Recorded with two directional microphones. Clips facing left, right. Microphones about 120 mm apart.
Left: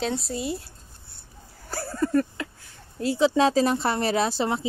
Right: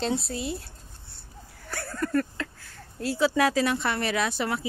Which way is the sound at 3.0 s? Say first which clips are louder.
Left 3 dB; 20° left (ahead or behind).